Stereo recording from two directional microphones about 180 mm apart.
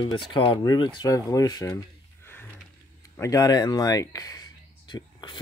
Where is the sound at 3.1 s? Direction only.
20° left (ahead or behind).